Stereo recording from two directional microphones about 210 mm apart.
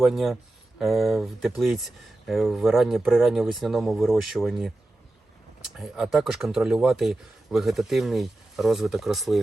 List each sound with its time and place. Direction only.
0.0 s speech: centre (ahead or behind)
5.7 s speech: centre (ahead or behind)